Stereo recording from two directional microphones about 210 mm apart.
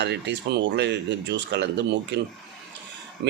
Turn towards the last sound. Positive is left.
turn(degrees=-55)  # may be behind; listen again after turning